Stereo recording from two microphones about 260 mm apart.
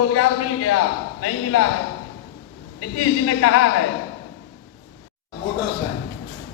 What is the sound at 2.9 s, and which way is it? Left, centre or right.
Speech, left.